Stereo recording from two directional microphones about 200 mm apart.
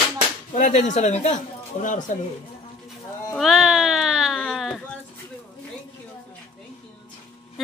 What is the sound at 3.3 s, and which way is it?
Sheep, centre (ahead or behind).